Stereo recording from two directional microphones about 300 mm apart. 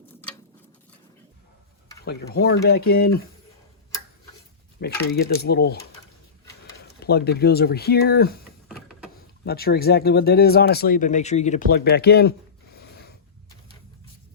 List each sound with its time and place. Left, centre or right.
2.0 s speech: left
4.8 s speech: left
6.7 s speech: left
12.7 s a sound: left